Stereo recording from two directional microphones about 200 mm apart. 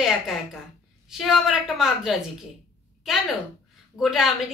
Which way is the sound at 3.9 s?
Centre (ahead or behind).